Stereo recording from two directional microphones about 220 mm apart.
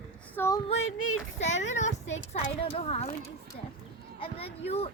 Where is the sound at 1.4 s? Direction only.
30° left (ahead or behind).